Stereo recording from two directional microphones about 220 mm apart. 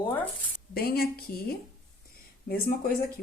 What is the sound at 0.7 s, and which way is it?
A woman's voice, 45° left (ahead or behind).